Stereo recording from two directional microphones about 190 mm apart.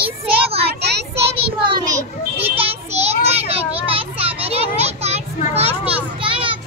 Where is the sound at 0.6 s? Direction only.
60° right (ahead or behind).